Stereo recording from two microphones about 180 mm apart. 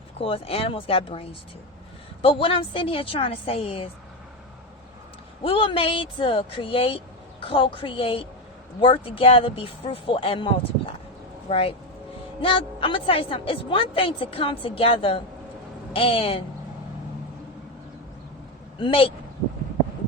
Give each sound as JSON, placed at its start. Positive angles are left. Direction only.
{"t": 0.2, "sound": "a woman's voice", "side_deg": 30}
{"t": 5.4, "sound": "a woman's voice", "side_deg": 30}
{"t": 18.8, "sound": "a woman's voice", "side_deg": 30}